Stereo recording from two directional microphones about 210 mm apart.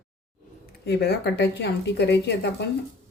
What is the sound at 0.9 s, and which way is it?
Speech, 55° left (ahead or behind).